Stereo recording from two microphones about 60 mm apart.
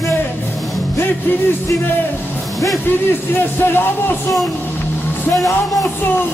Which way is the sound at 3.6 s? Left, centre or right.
Left.